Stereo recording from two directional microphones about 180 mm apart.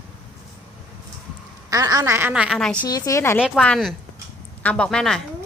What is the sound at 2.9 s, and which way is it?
Speech, 20° left (ahead or behind).